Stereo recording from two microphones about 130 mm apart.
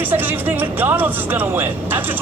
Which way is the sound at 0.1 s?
15° right (ahead or behind).